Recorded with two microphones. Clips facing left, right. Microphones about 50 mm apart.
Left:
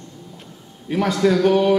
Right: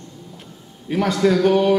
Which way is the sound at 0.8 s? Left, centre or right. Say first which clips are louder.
Even; centre.